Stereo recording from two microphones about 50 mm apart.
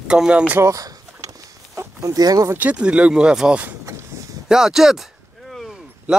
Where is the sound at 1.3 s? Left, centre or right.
Right.